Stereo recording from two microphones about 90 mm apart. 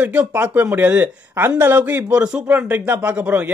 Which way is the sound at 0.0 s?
15° right (ahead or behind).